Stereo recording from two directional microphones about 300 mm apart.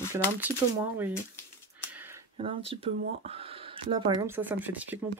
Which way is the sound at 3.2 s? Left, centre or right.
Centre.